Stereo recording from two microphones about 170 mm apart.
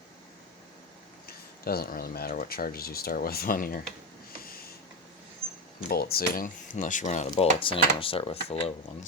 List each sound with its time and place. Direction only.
1.6 s speech: 60° left (ahead or behind)
5.9 s speech: 65° left (ahead or behind); by 7.3 s 45° left (ahead or behind)
7.3 s speech: 30° left (ahead or behind)